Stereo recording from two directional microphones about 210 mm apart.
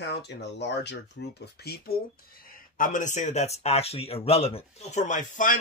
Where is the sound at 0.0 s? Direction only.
55° left (ahead or behind).